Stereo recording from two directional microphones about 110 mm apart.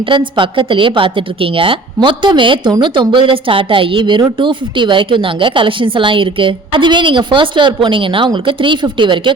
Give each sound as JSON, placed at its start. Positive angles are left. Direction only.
{"t": 0.1, "sound": "a woman's voice", "side_deg": -50}